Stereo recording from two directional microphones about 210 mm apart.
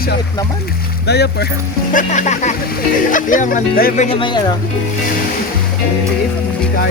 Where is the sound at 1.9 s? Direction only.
35° left (ahead or behind).